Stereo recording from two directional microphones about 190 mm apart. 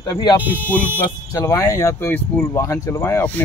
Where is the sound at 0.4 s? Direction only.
10° right (ahead or behind).